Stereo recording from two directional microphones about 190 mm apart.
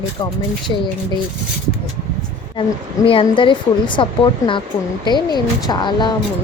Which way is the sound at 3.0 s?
30° left (ahead or behind).